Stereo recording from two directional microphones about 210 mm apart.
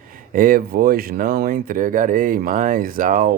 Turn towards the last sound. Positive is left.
turn(degrees=-40)  # may be behind; listen again after turning